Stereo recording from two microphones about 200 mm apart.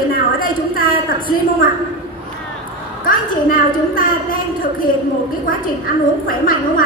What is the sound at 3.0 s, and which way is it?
A woman's voice, 45° left (ahead or behind).